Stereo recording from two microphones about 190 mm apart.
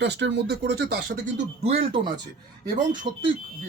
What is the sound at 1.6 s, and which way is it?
Speech, 30° right (ahead or behind).